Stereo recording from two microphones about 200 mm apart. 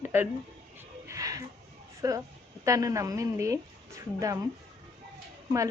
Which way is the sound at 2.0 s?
20° right (ahead or behind).